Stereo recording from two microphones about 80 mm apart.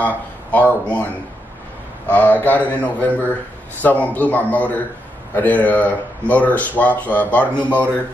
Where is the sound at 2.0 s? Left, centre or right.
Left.